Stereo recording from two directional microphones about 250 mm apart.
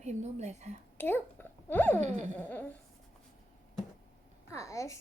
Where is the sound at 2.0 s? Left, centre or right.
Right.